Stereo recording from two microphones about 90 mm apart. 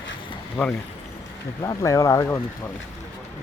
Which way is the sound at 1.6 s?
35° left (ahead or behind).